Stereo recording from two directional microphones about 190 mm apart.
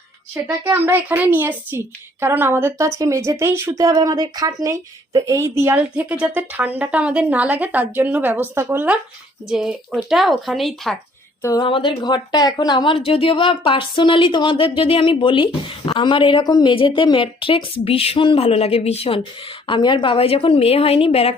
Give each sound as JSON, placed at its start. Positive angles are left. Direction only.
{"t": 0.4, "sound": "speech", "side_deg": -10}
{"t": 11.4, "sound": "a woman's voice", "side_deg": 20}